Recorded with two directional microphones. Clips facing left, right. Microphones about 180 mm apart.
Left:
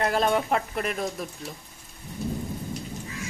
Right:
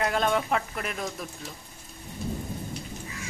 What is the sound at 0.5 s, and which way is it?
Speech, 35° left (ahead or behind).